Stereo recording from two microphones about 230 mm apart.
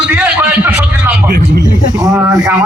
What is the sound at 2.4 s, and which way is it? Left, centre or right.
Speech, centre.